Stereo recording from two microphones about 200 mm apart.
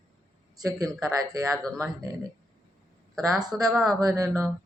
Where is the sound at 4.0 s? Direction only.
20° right (ahead or behind).